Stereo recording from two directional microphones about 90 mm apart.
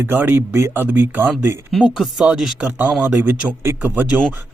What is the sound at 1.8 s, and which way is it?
Speech, 5° right (ahead or behind).